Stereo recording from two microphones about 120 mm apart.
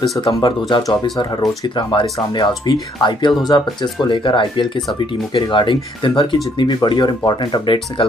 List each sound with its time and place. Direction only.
0.3 s speech: 40° left (ahead or behind)